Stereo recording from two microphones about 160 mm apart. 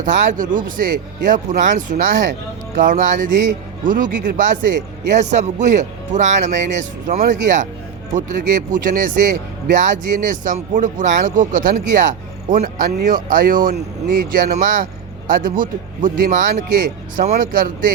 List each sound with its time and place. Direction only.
0.0 s speech: 55° right (ahead or behind)